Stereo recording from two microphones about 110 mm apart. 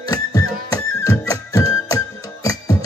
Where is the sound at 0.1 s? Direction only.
35° left (ahead or behind).